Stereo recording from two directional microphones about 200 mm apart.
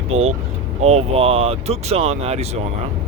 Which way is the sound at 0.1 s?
30° right (ahead or behind).